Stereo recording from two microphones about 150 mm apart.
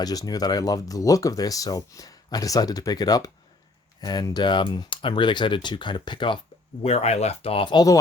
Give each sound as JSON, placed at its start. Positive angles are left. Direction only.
{"t": 0.0, "sound": "speech", "side_deg": 25}
{"t": 6.8, "sound": "speech", "side_deg": 45}